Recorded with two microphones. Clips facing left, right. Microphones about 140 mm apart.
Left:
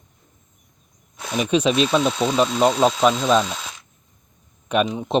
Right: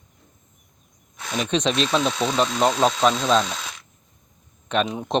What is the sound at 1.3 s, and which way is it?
Speech, 10° left (ahead or behind).